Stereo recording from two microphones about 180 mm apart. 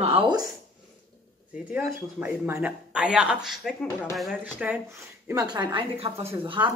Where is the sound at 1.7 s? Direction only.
10° right (ahead or behind).